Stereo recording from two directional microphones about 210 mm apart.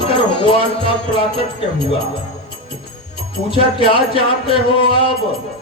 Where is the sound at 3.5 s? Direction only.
25° left (ahead or behind).